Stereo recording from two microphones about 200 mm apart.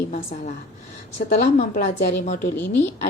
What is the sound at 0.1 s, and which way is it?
Speech, 40° left (ahead or behind).